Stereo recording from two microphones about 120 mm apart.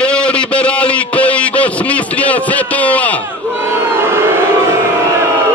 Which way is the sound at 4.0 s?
20° right (ahead or behind).